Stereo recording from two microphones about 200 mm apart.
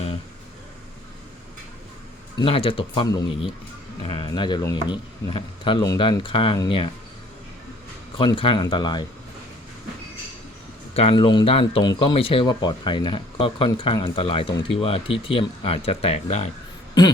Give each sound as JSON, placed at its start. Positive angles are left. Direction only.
{"t": 2.4, "sound": "speech", "side_deg": 25}
{"t": 8.2, "sound": "speech", "side_deg": 25}
{"t": 10.9, "sound": "speech", "side_deg": 30}